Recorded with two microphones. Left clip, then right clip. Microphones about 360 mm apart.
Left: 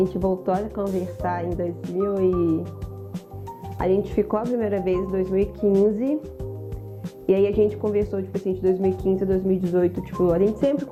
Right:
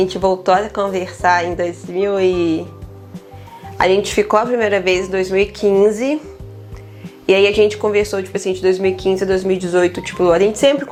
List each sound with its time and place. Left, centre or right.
0.4 s speech: centre
3.8 s speech: centre